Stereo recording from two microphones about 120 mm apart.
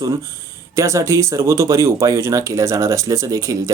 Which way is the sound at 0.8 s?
25° right (ahead or behind).